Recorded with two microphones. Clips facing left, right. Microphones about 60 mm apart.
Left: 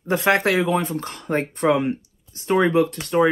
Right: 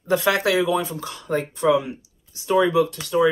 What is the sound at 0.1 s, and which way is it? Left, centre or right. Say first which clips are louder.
Speech: left 1 dB; left.